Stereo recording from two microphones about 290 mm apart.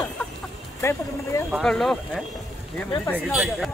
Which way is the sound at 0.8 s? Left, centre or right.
Centre.